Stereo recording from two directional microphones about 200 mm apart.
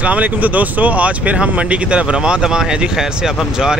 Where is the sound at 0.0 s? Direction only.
5° right (ahead or behind).